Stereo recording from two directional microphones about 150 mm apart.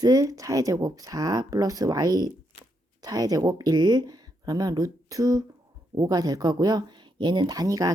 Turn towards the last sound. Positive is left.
turn(degrees=-25)  # may be behind; listen again after turning